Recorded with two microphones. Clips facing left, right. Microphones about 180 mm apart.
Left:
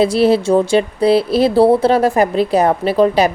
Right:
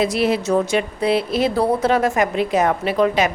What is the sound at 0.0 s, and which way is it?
Speech, 30° left (ahead or behind).